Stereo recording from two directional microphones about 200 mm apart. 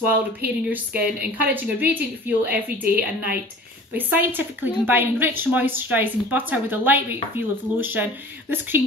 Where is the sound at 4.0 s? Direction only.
10° right (ahead or behind).